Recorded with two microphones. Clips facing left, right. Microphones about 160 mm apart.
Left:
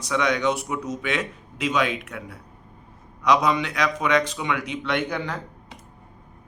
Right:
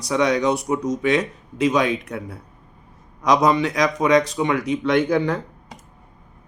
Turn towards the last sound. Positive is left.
turn(degrees=-45)  # may be behind; listen again after turning